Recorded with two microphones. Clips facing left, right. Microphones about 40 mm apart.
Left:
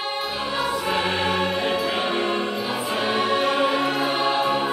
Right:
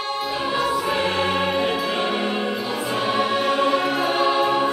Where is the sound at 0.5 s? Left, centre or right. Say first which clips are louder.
Right 1 dB; centre.